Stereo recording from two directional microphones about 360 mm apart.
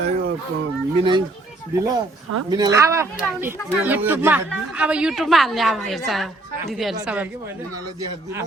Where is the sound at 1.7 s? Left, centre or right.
Centre.